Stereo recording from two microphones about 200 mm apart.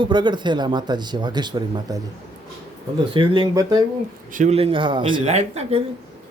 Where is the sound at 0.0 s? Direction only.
25° right (ahead or behind).